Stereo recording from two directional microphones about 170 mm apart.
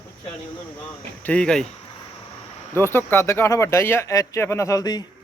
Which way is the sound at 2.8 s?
15° left (ahead or behind).